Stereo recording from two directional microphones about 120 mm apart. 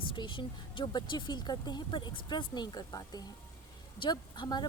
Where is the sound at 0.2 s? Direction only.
40° left (ahead or behind).